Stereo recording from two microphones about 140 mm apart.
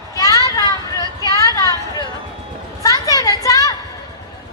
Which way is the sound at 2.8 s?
25° left (ahead or behind).